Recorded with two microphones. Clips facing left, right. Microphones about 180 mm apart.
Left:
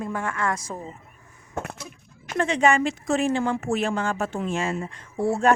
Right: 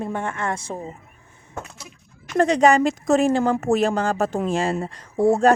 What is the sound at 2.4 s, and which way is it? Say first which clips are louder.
Speech: right 5 dB; 40° right (ahead or behind).